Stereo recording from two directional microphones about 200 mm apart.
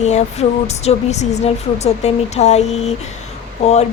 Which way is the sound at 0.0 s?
35° left (ahead or behind).